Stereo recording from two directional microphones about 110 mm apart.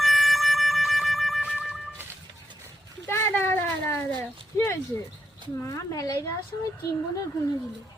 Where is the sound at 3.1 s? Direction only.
25° left (ahead or behind).